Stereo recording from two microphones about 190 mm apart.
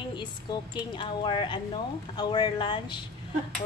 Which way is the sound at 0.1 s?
25° left (ahead or behind).